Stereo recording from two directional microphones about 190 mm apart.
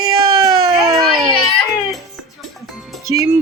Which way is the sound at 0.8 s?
Centre (ahead or behind).